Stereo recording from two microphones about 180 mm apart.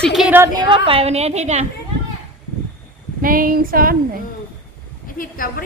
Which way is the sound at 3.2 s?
50° right (ahead or behind).